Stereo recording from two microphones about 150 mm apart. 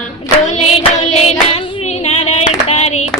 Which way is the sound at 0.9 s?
50° left (ahead or behind).